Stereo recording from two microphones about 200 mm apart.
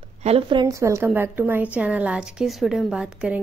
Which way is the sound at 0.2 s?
30° right (ahead or behind).